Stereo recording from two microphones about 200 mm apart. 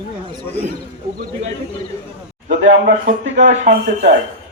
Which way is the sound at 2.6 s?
70° right (ahead or behind).